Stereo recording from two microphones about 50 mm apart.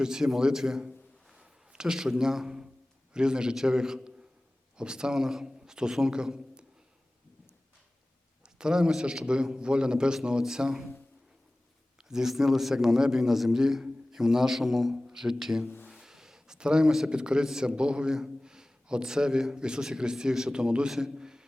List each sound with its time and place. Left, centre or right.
0.0 s a man's voice: centre
8.4 s a man's voice: centre
12.0 s a man's voice: centre
20.9 s a sound: centre